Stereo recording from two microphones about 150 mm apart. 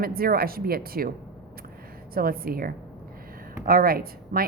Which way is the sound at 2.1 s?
80° right.